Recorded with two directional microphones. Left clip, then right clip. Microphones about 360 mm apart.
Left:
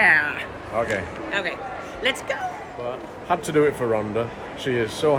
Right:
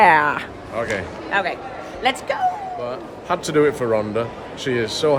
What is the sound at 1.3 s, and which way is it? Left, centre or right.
A woman's voice, right.